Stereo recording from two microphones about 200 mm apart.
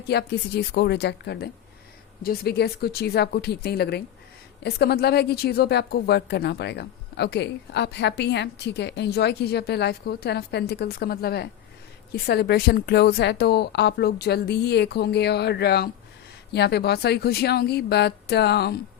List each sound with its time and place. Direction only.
0.1 s a woman's voice: 55° left (ahead or behind)